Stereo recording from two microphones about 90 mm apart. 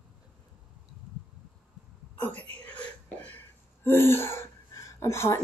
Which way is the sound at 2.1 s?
20° left (ahead or behind).